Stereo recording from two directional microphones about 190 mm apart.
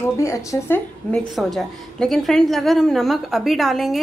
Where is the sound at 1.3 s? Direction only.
Centre (ahead or behind).